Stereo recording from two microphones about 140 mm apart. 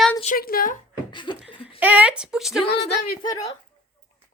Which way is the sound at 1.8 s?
10° right (ahead or behind).